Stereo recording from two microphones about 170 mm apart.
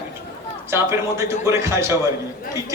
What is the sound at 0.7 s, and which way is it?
A man's voice, 15° right (ahead or behind).